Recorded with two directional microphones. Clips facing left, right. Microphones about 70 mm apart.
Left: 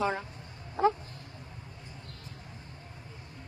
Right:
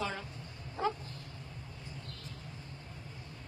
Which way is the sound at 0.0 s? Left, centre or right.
Left.